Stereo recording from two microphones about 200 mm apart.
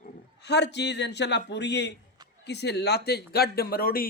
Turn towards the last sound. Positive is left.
turn(degrees=50)  # may be behind; listen again after turning